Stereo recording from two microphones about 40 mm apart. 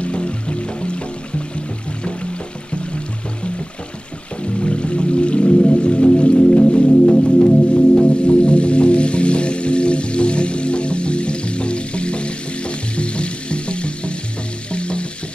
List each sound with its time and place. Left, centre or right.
0.0 s music: left
4.4 s music: left